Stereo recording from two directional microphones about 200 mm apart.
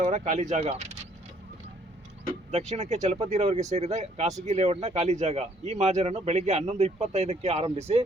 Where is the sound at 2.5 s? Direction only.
35° right (ahead or behind).